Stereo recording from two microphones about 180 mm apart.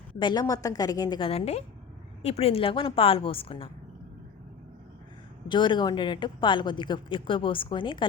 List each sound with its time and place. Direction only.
0.2 s a woman's voice: 25° left (ahead or behind)
5.5 s a woman's voice: 25° left (ahead or behind)